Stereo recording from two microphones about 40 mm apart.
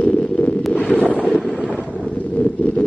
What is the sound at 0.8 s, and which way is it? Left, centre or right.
Wind noise, left.